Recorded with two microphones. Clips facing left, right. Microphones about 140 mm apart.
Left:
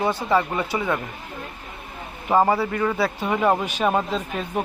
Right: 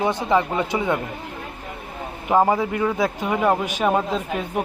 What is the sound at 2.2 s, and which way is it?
Speech, 10° right (ahead or behind).